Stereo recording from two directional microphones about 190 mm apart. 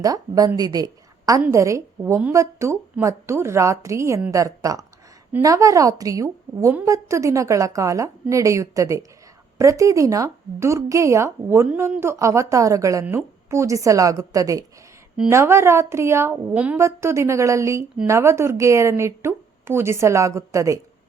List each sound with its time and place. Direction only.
0.0 s speech: 20° right (ahead or behind)